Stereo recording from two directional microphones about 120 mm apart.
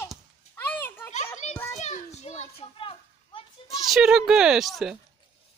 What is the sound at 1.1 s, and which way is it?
Children playing, 70° left (ahead or behind).